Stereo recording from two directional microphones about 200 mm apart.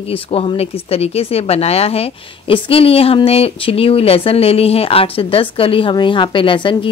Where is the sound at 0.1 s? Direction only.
30° left (ahead or behind).